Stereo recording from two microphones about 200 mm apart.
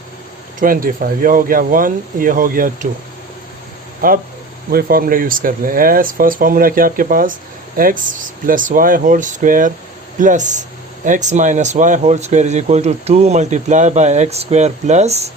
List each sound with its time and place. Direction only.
0.6 s speech: 45° right (ahead or behind)
4.0 s speech: 45° right (ahead or behind)